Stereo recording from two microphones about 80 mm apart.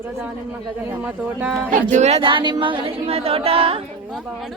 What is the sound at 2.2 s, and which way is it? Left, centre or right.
Speech, right.